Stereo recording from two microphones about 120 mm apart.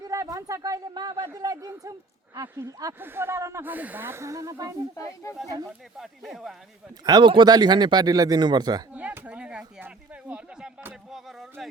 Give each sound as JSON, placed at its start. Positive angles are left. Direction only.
{"t": 0.1, "sound": "speech", "side_deg": -25}
{"t": 4.9, "sound": "speech", "side_deg": 25}
{"t": 6.0, "sound": "speech", "side_deg": 0}
{"t": 7.0, "sound": "speech", "side_deg": -40}
{"t": 9.0, "sound": "a sound", "side_deg": -10}